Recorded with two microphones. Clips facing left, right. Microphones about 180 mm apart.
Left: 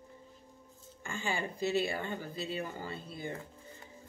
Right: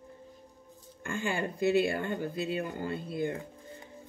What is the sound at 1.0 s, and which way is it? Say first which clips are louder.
Speech: right 4 dB; 55° right (ahead or behind).